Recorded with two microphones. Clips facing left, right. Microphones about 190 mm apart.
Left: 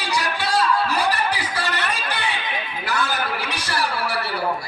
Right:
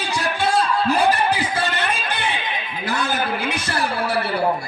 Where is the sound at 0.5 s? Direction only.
25° right (ahead or behind).